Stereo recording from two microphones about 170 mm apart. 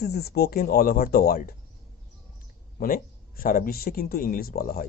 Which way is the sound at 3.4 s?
60° left (ahead or behind).